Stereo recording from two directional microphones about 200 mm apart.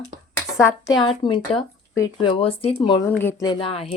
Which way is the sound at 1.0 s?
25° left (ahead or behind).